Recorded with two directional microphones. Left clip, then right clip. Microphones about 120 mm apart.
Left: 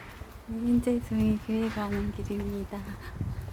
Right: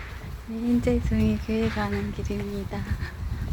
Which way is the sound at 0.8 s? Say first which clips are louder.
Right 3 dB; 5° right (ahead or behind).